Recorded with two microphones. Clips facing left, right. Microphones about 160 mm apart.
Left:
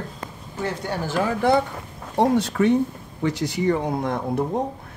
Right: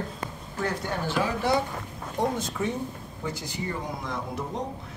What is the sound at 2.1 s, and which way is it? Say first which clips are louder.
Speech: left 9 dB; 75° left (ahead or behind).